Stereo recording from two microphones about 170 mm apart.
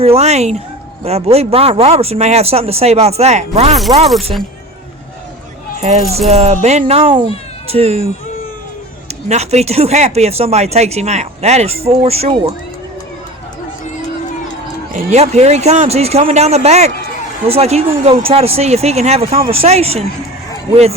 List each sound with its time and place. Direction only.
0.0 s speech: 35° right (ahead or behind)
6.1 s speech: 40° right (ahead or behind)
9.3 s speech: 40° right (ahead or behind)
14.9 s speech: 40° right (ahead or behind)